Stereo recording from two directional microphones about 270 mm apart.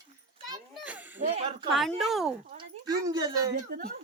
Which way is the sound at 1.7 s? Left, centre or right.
Centre.